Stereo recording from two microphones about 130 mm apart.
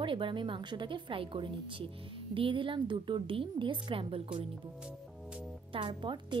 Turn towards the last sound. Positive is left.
turn(degrees=-40)  # may be behind; listen again after turning